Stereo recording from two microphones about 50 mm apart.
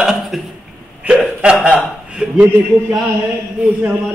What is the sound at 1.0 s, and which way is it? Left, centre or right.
A man's voice, right.